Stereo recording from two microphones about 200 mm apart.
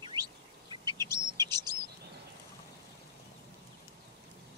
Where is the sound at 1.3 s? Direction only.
20° right (ahead or behind).